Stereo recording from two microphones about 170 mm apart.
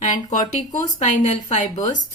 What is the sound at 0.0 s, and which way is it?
Speech, 45° left (ahead or behind).